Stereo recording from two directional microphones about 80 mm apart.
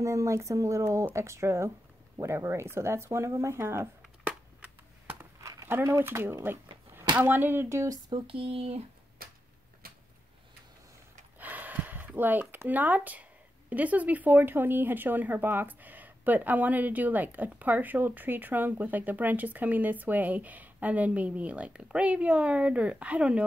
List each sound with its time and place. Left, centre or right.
0.0 s speech: right
5.4 s a sound: right
5.9 s speech: right
11.3 s gasp: right
12.2 s speech: right